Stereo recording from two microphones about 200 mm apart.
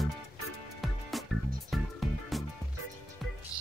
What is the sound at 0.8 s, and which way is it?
Music, centre (ahead or behind).